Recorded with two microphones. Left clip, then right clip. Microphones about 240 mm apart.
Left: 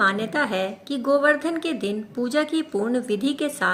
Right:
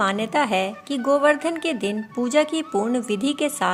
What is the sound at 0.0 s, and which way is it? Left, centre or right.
A woman's voice, right.